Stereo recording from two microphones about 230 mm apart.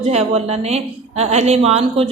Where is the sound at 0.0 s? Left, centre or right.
Right.